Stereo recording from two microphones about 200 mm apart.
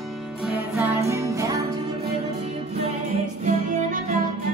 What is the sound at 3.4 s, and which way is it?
Music, 40° right (ahead or behind).